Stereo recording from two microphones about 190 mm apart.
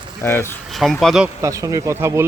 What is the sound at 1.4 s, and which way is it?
Speech, 15° right (ahead or behind).